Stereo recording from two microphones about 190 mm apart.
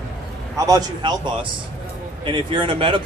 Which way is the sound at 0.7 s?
20° right (ahead or behind).